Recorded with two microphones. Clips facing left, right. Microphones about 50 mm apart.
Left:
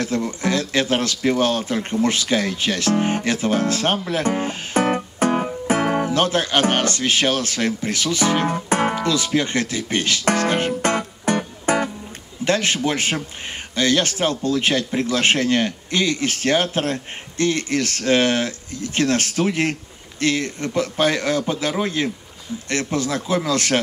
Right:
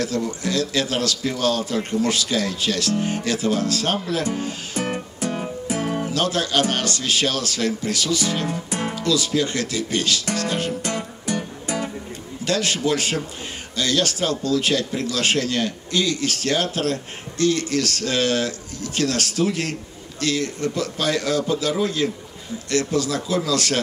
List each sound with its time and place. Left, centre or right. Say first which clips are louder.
0.0 s speech: left 2 dB; left
6.0 s speech: left 3 dB; left
12.4 s speech: left 2 dB; left